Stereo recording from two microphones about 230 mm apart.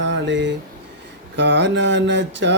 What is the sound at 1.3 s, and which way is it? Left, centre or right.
Male singing, right.